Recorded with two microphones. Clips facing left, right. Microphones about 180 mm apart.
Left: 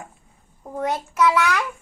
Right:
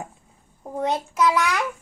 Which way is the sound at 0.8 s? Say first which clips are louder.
Left 1 dB; 15° right (ahead or behind).